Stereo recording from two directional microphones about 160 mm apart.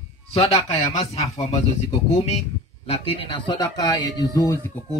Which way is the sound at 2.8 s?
35° left (ahead or behind).